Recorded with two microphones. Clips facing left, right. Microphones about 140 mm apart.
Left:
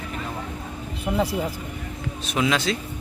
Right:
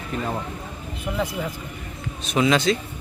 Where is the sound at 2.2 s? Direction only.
Centre (ahead or behind).